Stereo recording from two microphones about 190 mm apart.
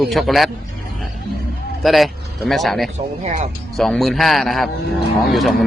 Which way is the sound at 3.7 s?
Centre (ahead or behind).